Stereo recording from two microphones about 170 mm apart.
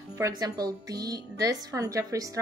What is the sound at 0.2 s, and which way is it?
A woman's voice, 20° right (ahead or behind).